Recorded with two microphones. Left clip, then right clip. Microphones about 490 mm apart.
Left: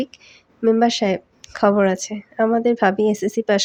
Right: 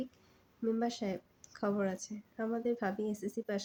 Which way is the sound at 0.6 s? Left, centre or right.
Centre.